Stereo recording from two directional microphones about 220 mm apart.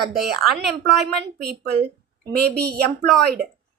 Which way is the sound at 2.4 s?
45° right (ahead or behind).